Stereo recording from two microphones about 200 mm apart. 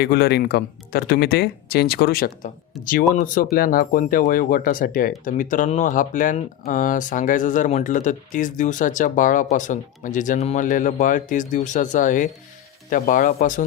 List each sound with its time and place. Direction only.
0.0 s speech: 55° left (ahead or behind)